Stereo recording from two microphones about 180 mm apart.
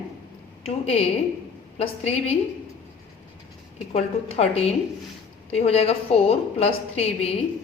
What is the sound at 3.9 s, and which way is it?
A woman's voice, 35° left (ahead or behind).